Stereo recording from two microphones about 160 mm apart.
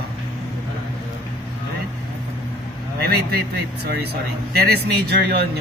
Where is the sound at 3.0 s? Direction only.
80° right.